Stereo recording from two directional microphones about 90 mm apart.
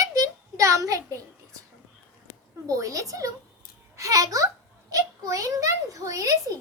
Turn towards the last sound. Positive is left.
turn(degrees=-40)  # may be behind; listen again after turning